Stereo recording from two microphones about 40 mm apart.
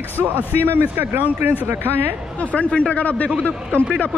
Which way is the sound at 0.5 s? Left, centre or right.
Right.